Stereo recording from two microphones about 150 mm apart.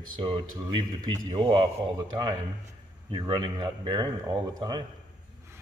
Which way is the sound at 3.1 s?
30° right (ahead or behind).